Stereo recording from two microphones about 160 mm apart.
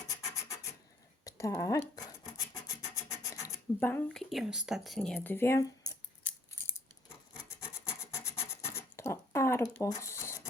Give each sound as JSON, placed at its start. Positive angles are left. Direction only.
{"t": 0.1, "sound": "rub", "side_deg": 20}
{"t": 1.2, "sound": "speech", "side_deg": 20}
{"t": 2.6, "sound": "rub", "side_deg": 20}
{"t": 6.2, "sound": "scissors", "side_deg": 15}
{"t": 8.1, "sound": "rub", "side_deg": 15}
{"t": 9.7, "sound": "a sound", "side_deg": 20}